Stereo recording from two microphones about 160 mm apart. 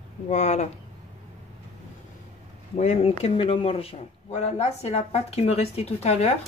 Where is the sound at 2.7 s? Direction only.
45° left (ahead or behind).